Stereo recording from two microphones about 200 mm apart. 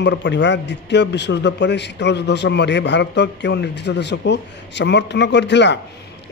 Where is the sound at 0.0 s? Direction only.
60° left (ahead or behind).